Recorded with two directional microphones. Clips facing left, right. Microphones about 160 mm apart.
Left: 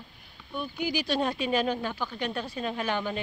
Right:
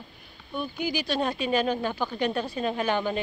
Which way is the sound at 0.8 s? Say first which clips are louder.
Even; 15° left (ahead or behind).